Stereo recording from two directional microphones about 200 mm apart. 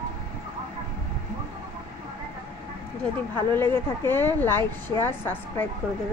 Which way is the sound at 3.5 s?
10° left (ahead or behind).